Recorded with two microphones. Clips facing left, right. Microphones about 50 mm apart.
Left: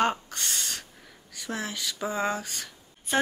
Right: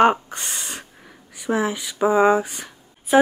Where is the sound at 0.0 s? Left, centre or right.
Right.